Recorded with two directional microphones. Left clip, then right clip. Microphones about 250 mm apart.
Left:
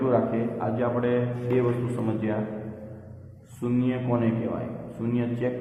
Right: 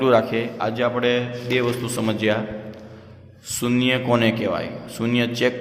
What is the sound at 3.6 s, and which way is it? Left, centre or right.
A man's voice, right.